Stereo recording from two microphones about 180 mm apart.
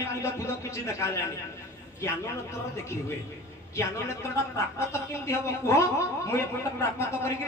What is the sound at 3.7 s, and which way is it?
Speech, 15° left (ahead or behind).